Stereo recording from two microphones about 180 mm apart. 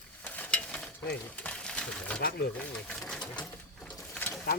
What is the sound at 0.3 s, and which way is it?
Stir, 10° left (ahead or behind).